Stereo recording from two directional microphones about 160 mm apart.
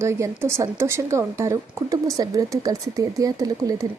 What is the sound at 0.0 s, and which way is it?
Speech, 15° right (ahead or behind).